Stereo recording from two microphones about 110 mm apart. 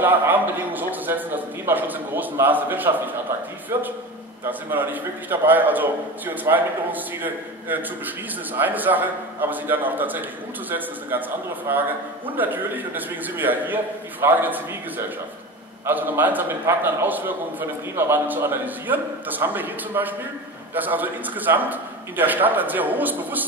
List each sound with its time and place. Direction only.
0.0 s a man's voice: 15° right (ahead or behind)
15.8 s a man's voice: 15° right (ahead or behind)